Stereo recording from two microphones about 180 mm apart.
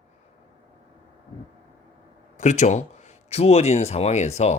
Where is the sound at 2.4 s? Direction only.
40° left (ahead or behind).